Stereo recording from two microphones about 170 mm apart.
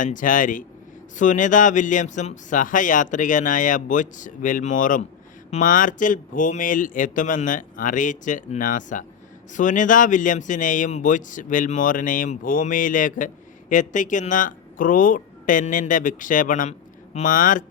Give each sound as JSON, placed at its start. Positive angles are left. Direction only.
{"t": 0.0, "sound": "speech", "side_deg": 50}